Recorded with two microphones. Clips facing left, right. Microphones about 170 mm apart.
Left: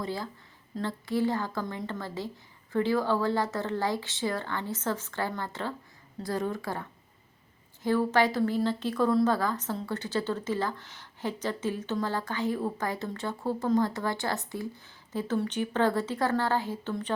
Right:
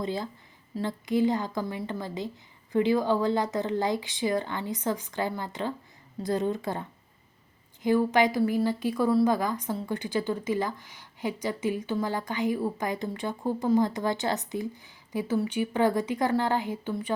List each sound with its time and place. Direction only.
0.0 s a woman's voice: 20° right (ahead or behind)